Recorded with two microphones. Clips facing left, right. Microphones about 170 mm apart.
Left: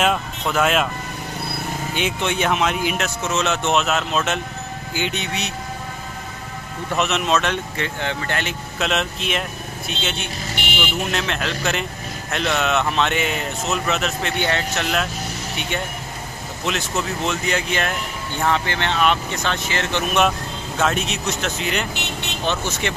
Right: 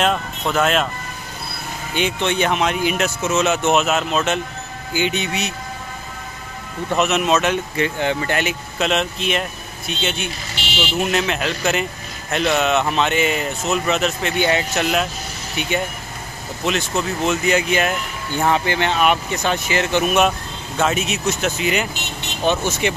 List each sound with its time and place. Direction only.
0.0 s speech: 5° left (ahead or behind)
2.0 s speech: 5° left (ahead or behind)
7.0 s speech: 5° right (ahead or behind)
8.7 s speech: centre (ahead or behind)
10.5 s vehicle: 55° left (ahead or behind)
11.1 s speech: 5° right (ahead or behind)
16.6 s speech: centre (ahead or behind)